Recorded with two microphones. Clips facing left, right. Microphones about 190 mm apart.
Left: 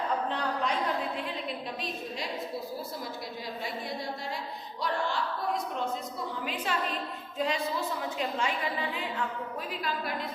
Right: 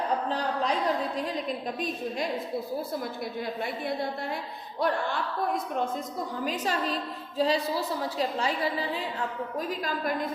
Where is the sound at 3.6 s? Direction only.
55° right (ahead or behind).